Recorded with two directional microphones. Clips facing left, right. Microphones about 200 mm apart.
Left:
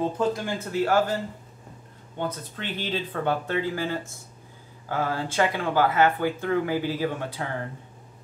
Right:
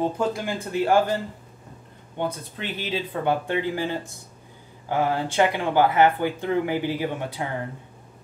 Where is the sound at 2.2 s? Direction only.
10° right (ahead or behind).